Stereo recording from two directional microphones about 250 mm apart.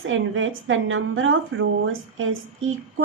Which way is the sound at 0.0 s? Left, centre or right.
Right.